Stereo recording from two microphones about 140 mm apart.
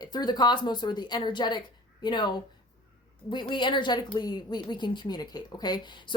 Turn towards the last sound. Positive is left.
turn(degrees=35)  # may be behind; listen again after turning